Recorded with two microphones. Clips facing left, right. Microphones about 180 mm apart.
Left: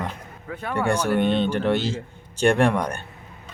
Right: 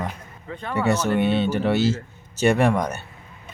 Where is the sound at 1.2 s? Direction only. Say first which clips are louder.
Even; 10° right (ahead or behind).